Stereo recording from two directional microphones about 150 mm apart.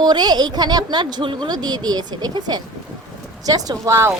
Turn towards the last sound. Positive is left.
turn(degrees=-20)  # may be behind; listen again after turning